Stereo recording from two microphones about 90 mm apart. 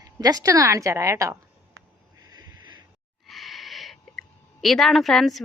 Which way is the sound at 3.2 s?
Centre (ahead or behind).